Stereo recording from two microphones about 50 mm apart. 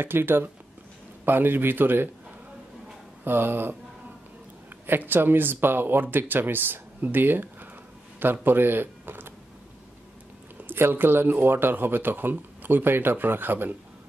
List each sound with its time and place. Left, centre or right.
0.0 s speech: right
3.3 s speech: right
4.8 s speech: right
10.6 s speech: right